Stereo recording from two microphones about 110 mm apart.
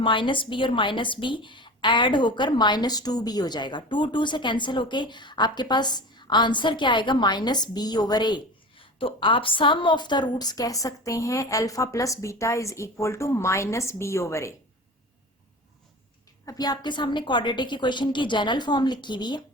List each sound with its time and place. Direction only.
0.0 s a woman's voice: 50° left (ahead or behind); by 14.5 s 25° left (ahead or behind)
16.5 s a woman's voice: 40° left (ahead or behind)